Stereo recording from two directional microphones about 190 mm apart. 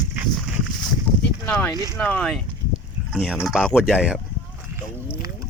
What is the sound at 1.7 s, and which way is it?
Speech, 20° right (ahead or behind).